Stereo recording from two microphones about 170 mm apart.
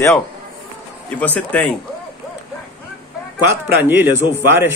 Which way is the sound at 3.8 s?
10° right (ahead or behind).